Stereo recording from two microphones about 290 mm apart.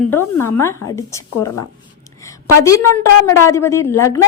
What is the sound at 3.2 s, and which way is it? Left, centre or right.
Speech, centre.